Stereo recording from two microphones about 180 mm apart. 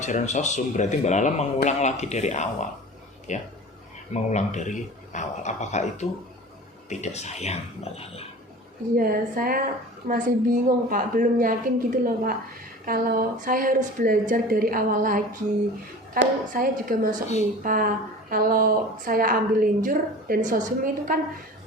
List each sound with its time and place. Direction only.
0.0 s a man's voice: 40° left (ahead or behind)
9.0 s a woman's voice: 50° right (ahead or behind)